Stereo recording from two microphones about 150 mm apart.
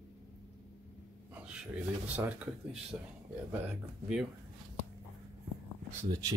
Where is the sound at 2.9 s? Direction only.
15° right (ahead or behind).